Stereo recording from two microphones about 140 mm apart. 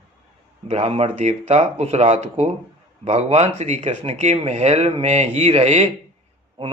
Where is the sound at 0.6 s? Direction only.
50° right (ahead or behind).